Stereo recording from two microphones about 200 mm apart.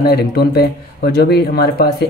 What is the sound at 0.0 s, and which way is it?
Speech, 55° left (ahead or behind).